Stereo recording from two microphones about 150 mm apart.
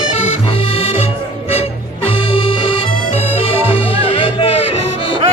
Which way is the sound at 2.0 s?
40° left (ahead or behind).